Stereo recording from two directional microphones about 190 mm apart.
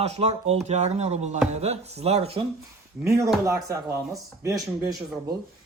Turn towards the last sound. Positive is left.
turn(degrees=-20)  # may be behind; listen again after turning